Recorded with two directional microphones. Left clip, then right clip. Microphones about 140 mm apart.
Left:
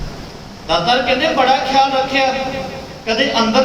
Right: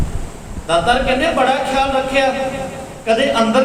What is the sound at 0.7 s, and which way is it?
A man's voice, 35° right (ahead or behind).